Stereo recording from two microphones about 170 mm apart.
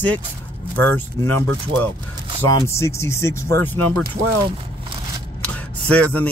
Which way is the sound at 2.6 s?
15° left (ahead or behind).